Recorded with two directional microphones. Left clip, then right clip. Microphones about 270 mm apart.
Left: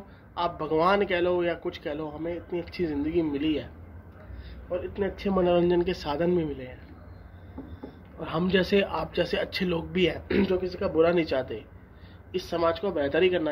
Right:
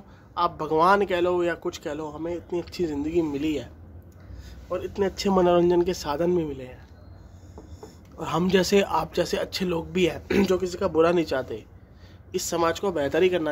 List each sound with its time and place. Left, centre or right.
0.3 s a man's voice: centre
8.2 s a man's voice: centre